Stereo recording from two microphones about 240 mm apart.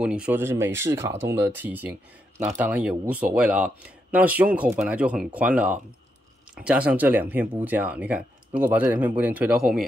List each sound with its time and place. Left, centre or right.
0.0 s speech: centre